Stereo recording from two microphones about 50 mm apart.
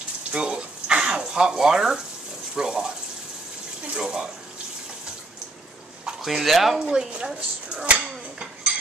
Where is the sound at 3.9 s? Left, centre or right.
Centre.